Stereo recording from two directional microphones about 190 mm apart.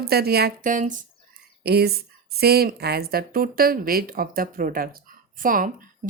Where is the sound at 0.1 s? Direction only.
55° right (ahead or behind).